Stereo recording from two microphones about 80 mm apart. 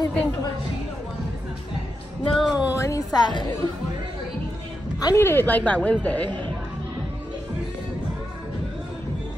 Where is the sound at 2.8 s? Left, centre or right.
Left.